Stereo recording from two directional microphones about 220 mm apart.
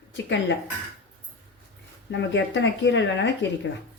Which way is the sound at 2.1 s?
55° left (ahead or behind).